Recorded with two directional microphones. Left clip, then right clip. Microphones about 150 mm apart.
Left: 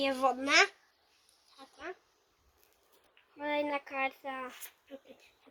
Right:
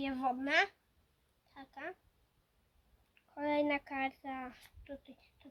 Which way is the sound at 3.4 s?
70° right (ahead or behind).